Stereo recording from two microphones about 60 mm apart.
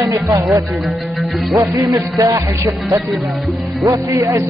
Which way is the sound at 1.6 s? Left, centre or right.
Right.